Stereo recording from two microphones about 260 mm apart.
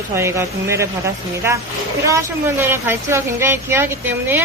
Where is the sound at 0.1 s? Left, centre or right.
Centre.